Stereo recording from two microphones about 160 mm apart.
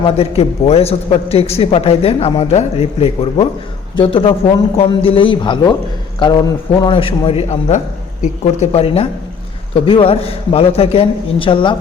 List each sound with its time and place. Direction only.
0.2 s a man's voice: 40° left (ahead or behind)
6.9 s a man's voice: 35° left (ahead or behind)